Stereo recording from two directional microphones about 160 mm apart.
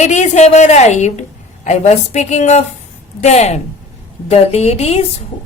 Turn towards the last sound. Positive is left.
turn(degrees=40)  # may be behind; listen again after turning